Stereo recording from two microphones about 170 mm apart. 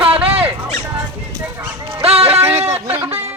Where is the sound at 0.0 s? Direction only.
35° right (ahead or behind).